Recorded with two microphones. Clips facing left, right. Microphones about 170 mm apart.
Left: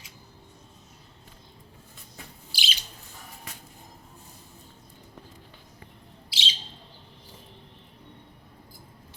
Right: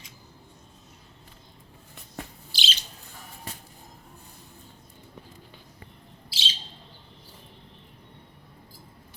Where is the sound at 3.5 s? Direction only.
30° right (ahead or behind).